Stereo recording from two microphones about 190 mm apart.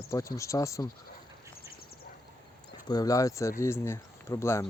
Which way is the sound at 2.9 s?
20° left (ahead or behind).